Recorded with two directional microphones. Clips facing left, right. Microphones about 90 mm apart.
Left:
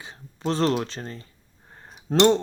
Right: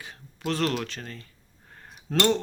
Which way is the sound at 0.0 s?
25° left (ahead or behind).